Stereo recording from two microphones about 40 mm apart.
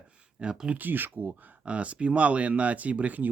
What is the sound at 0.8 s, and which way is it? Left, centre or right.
Speech, right.